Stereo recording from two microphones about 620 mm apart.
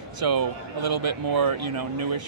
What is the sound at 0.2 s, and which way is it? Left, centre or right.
Speech, right.